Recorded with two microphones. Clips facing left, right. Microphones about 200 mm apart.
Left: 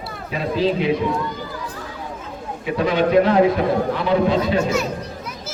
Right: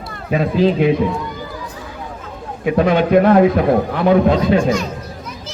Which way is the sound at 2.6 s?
55° right (ahead or behind).